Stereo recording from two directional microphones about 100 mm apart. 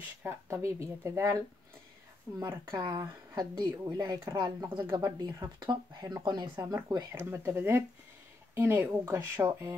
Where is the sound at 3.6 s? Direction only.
45° right (ahead or behind).